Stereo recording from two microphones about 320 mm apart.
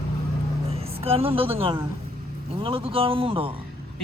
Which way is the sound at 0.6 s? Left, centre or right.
Centre.